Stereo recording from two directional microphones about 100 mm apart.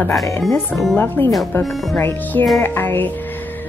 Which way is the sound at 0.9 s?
20° left (ahead or behind).